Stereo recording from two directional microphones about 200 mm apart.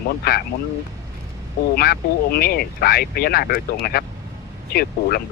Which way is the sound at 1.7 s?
50° left (ahead or behind).